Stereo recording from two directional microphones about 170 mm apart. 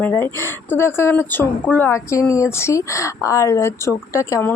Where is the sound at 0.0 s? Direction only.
15° left (ahead or behind).